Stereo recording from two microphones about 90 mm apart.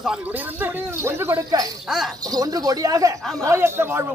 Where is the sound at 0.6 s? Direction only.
30° right (ahead or behind).